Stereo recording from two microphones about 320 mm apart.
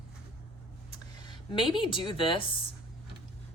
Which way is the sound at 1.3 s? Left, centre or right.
Centre.